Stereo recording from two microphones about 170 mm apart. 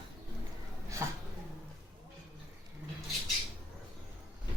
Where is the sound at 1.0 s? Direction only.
15° right (ahead or behind).